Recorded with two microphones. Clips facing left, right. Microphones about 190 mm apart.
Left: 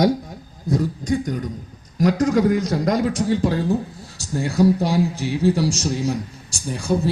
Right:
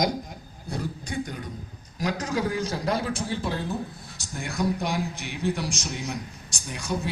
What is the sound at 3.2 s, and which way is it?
A man's voice, 40° left (ahead or behind).